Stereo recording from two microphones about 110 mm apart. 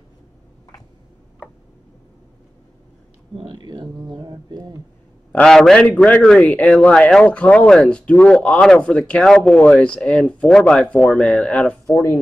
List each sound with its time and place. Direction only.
3.5 s mantra: 40° right (ahead or behind)
5.3 s a man's voice: 5° left (ahead or behind)
11.9 s speech: 25° left (ahead or behind)